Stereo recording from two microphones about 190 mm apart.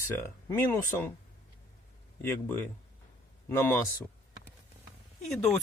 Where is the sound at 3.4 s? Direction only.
15° left (ahead or behind).